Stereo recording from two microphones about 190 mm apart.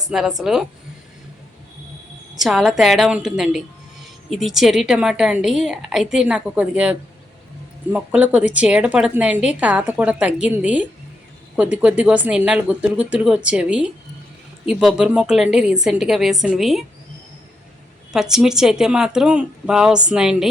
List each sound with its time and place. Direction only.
0.1 s a woman's voice: 5° right (ahead or behind)
2.3 s a woman's voice: centre (ahead or behind)
7.9 s a woman's voice: 5° right (ahead or behind)
18.1 s a woman's voice: 5° right (ahead or behind)